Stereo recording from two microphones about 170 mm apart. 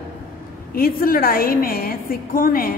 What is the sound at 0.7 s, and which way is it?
A woman's voice, 60° left (ahead or behind).